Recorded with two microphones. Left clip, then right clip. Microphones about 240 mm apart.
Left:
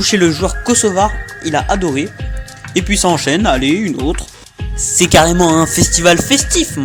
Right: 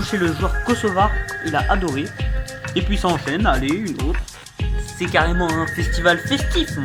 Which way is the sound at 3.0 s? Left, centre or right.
Left.